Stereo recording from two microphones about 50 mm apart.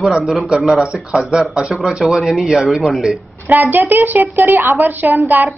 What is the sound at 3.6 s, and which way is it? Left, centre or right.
A woman's voice, right.